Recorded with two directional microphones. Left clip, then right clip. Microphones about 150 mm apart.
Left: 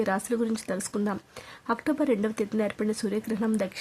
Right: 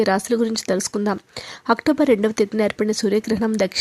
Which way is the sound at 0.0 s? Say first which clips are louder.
Right 8 dB; 35° right (ahead or behind).